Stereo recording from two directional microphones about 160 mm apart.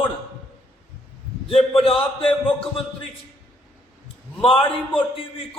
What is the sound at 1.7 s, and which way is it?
Speech, 35° left (ahead or behind).